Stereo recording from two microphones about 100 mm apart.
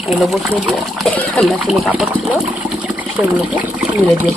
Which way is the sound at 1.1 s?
15° left (ahead or behind).